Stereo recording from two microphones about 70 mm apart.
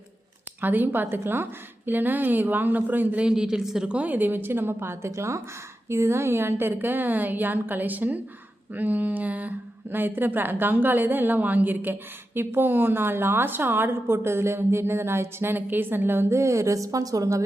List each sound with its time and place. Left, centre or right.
0.6 s a woman's voice: right
3.2 s a woman's voice: centre; by 17.4 s right